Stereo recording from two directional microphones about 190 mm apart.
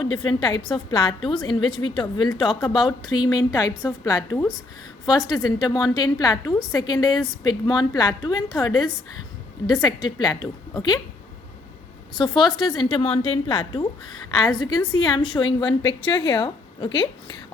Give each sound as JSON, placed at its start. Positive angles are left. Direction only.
{"t": 0.3, "sound": "a woman's voice", "side_deg": 25}
{"t": 12.1, "sound": "a woman's voice", "side_deg": 25}